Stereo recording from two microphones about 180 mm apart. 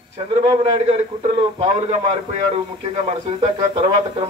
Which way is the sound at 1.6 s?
40° right (ahead or behind).